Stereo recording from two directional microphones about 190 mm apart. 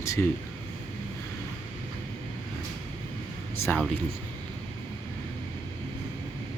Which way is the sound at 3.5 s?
10° left (ahead or behind).